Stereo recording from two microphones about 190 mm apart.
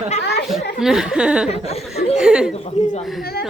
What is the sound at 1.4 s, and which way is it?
Speech, 35° left (ahead or behind).